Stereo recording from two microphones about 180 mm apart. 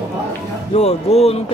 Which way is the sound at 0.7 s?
35° left (ahead or behind).